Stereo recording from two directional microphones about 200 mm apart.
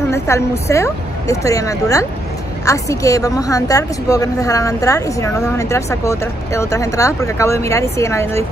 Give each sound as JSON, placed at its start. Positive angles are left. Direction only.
{"t": 0.1, "sound": "a woman's voice", "side_deg": 15}